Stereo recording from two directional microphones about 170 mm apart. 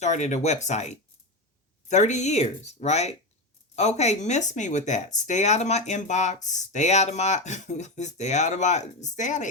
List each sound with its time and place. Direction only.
0.0 s speech: 45° left (ahead or behind)